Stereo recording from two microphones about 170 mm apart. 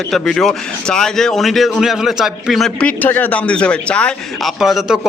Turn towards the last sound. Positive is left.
turn(degrees=-5)  # may be behind; listen again after turning